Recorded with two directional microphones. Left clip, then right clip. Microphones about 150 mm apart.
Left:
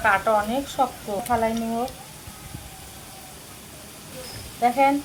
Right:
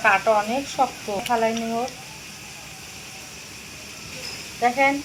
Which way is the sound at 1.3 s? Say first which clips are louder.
Right 1 dB; 5° right (ahead or behind).